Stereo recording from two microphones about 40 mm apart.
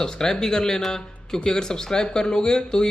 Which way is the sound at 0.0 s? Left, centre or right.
Centre.